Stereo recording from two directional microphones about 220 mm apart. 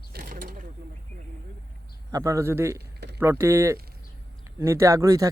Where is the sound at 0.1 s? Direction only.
40° right (ahead or behind).